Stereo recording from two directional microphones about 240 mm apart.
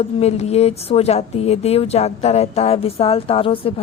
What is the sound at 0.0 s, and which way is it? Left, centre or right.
Speech, left.